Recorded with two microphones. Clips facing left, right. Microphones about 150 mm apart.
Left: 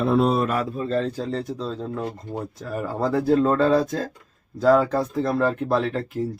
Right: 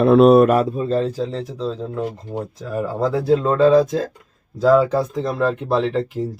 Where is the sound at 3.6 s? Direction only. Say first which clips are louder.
Right 6 dB; 90° right.